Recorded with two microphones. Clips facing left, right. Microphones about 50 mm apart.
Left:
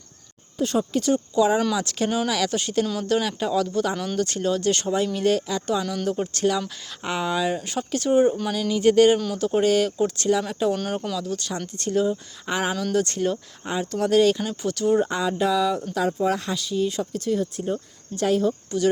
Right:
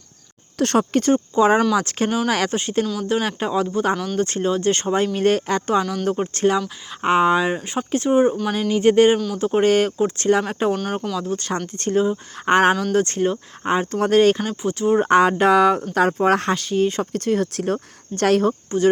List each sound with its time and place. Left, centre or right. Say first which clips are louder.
0.6 s speech: right 5 dB; right
1.0 s speech: right 2 dB; right
3.9 s speech: right 3 dB; centre
4.2 s speech: even; right
5.8 s speech: right 3 dB; centre
6.1 s speech: right 5 dB; right
8.7 s speech: right 2 dB; right
9.1 s speech: right 2 dB; centre
9.4 s speech: right 5 dB; right
12.9 s speech: right 4 dB; right
14.4 s speech: right 3 dB; centre
15.0 s speech: right 8 dB; right